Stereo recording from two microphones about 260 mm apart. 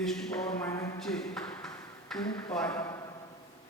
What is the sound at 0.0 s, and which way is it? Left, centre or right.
A man's voice, centre.